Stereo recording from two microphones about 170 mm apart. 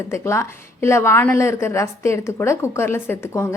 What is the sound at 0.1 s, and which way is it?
A woman's voice, 15° left (ahead or behind).